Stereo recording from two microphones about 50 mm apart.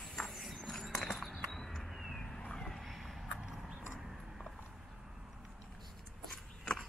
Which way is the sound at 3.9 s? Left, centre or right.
Centre.